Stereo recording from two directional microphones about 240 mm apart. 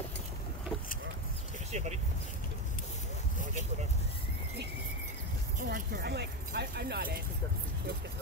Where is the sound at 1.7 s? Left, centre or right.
Right.